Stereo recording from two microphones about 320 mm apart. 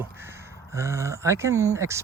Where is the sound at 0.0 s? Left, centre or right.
Centre.